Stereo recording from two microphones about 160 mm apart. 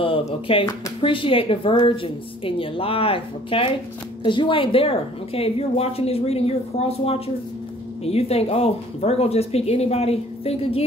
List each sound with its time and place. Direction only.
0.0 s a woman's voice: 35° left (ahead or behind)